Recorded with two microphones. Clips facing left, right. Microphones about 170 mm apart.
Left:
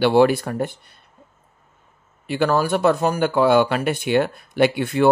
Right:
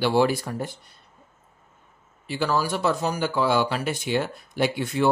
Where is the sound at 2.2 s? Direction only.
60° left (ahead or behind).